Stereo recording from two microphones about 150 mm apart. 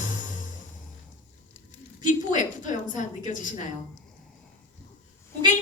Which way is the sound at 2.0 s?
60° left (ahead or behind).